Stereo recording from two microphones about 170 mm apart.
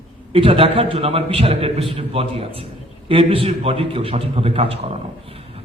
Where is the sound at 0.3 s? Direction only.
30° right (ahead or behind).